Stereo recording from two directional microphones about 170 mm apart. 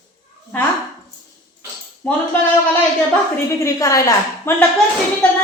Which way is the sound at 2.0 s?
10° left (ahead or behind).